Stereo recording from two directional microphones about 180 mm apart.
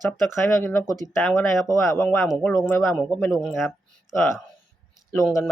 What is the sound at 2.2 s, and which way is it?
Speech, centre (ahead or behind).